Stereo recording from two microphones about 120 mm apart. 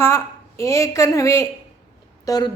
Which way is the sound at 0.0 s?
25° left (ahead or behind).